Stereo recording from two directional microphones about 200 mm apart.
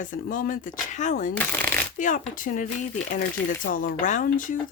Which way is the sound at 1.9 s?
40° left (ahead or behind).